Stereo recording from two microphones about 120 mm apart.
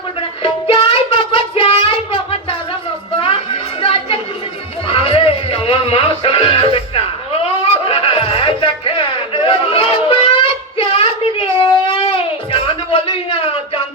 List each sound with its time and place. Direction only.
0.7 s child singing: 50° left (ahead or behind)
3.8 s chatter: 50° left (ahead or behind)
4.9 s music: 50° left (ahead or behind)